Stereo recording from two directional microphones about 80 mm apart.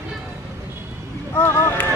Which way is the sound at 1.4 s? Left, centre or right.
Left.